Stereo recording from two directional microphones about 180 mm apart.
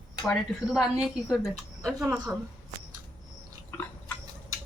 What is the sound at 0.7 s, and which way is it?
A child's voice, centre (ahead or behind).